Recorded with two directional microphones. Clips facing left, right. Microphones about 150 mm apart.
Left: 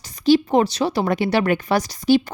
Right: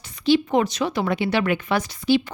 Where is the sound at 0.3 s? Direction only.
35° left (ahead or behind).